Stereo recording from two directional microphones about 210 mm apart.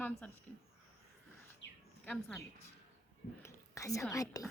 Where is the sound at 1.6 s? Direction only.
60° left (ahead or behind).